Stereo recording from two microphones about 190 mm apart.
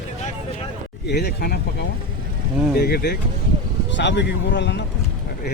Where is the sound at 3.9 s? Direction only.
65° left (ahead or behind).